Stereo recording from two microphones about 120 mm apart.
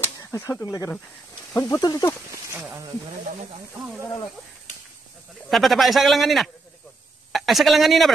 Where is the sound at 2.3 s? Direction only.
20° right (ahead or behind).